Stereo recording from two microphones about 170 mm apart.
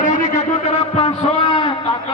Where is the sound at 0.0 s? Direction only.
50° left (ahead or behind).